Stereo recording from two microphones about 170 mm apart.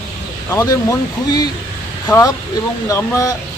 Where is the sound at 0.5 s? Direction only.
20° left (ahead or behind).